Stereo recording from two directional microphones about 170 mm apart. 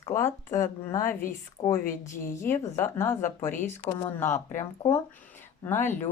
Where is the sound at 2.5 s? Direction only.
15° left (ahead or behind).